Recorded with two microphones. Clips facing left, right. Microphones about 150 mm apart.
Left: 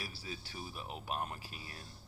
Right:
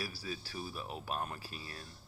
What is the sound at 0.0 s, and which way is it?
Speech, 20° left (ahead or behind).